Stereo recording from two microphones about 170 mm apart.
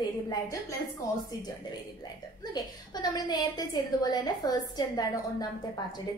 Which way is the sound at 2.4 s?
25° left (ahead or behind).